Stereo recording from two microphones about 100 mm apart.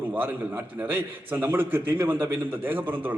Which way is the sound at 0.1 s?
20° right (ahead or behind).